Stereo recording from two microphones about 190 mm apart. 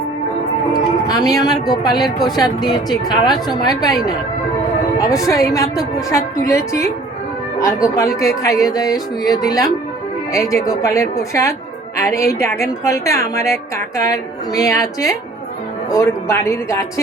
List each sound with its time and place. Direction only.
0.7 s a woman's voice: 20° left (ahead or behind)